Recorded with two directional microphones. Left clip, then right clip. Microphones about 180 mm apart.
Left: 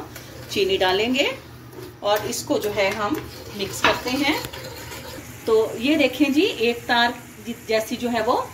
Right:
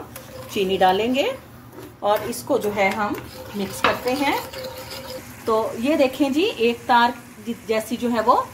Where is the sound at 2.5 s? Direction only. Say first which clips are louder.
Right 2 dB; 50° right (ahead or behind).